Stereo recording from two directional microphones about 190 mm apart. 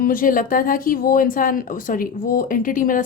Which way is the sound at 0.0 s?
45° left (ahead or behind).